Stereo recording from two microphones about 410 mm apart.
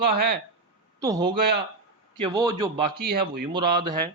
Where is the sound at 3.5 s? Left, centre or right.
Centre.